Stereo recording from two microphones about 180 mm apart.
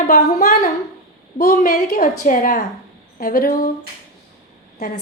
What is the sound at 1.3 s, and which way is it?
A woman's voice, 55° left (ahead or behind).